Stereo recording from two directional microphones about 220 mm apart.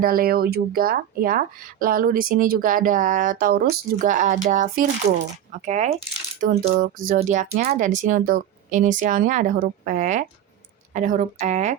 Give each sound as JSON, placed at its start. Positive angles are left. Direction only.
{"t": 0.0, "sound": "speech", "side_deg": -40}